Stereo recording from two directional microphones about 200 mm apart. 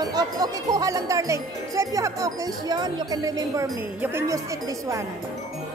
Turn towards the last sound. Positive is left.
turn(degrees=-15)  # may be behind; listen again after turning